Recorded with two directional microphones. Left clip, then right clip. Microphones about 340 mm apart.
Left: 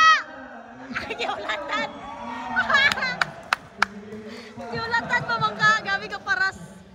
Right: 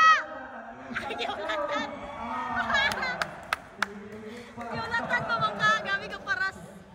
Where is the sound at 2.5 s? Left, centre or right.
Centre.